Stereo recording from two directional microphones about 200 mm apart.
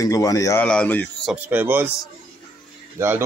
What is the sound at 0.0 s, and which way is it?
Speech, 15° left (ahead or behind).